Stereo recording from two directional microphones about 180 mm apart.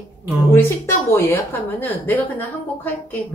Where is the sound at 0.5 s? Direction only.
15° left (ahead or behind).